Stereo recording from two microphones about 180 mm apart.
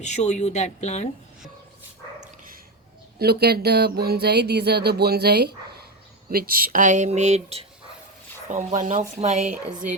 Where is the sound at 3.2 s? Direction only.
60° right (ahead or behind); by 7.6 s 40° right (ahead or behind).